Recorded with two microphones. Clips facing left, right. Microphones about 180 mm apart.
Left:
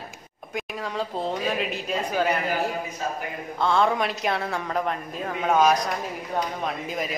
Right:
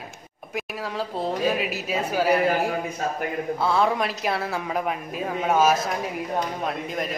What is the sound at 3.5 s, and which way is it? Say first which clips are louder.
Speech: left 1 dB; 5° right (ahead or behind).